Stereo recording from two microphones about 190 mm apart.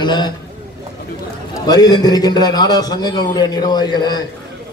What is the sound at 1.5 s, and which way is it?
A man's voice, 20° left (ahead or behind).